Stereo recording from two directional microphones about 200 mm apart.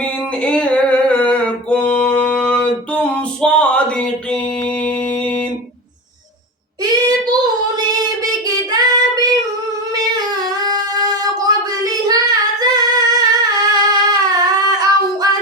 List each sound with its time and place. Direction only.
0.0 s a sound: 5° left (ahead or behind)
2.9 s music: 5° left (ahead or behind)
6.8 s child singing: 20° right (ahead or behind)
10.7 s child singing: 20° right (ahead or behind)